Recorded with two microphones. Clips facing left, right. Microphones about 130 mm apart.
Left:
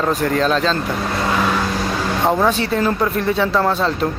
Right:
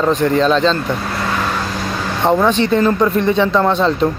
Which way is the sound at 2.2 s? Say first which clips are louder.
Right 4 dB; 5° left (ahead or behind).